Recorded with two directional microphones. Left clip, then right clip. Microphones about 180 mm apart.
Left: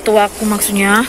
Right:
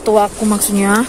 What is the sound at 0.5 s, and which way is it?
Speech, 25° right (ahead or behind).